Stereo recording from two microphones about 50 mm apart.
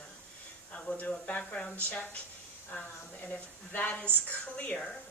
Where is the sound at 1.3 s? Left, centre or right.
Left.